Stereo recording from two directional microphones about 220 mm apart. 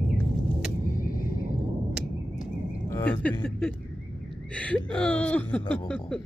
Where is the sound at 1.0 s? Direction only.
40° left (ahead or behind).